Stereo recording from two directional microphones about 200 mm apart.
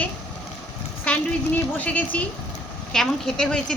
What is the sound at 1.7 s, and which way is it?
A woman's voice, 5° left (ahead or behind).